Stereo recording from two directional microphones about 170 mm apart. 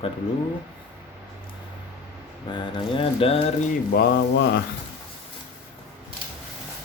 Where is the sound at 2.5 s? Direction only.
25° left (ahead or behind).